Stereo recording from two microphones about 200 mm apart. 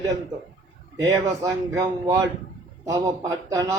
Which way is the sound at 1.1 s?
20° right (ahead or behind).